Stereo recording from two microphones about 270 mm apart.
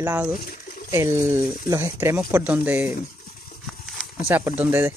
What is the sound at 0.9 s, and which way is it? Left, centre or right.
Speech, centre.